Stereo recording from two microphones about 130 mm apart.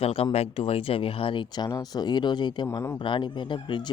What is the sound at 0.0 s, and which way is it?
Speech, 45° left (ahead or behind).